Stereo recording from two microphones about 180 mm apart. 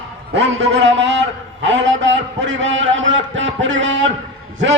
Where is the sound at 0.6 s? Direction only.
90° right.